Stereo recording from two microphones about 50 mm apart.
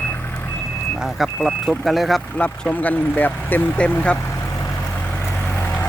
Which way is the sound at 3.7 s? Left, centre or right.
Left.